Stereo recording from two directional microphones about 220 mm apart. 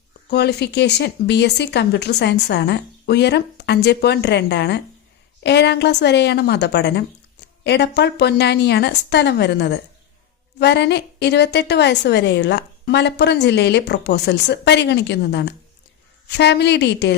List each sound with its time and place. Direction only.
0.3 s a woman's voice: 50° left (ahead or behind)